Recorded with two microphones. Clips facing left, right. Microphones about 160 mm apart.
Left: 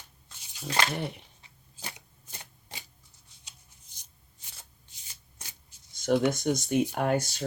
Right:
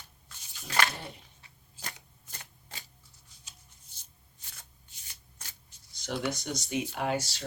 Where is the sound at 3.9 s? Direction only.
15° left (ahead or behind).